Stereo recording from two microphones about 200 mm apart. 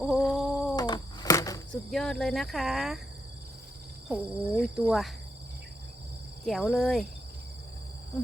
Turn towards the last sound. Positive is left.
turn(degrees=0)  # may be behind; listen again after turning